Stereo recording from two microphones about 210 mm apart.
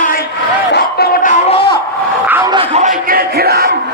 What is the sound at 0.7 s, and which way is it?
Crowd, 50° left (ahead or behind).